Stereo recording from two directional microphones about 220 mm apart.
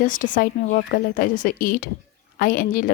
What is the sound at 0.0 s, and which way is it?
A woman's voice, 35° left (ahead or behind).